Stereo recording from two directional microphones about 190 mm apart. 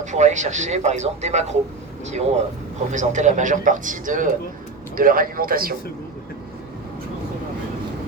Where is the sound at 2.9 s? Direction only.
40° right (ahead or behind).